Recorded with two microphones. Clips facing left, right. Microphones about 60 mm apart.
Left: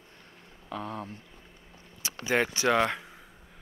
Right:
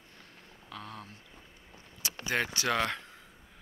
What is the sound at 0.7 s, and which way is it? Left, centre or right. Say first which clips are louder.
Speech: left 8 dB; centre.